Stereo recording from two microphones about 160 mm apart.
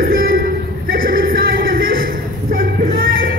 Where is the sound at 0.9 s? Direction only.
65° right (ahead or behind).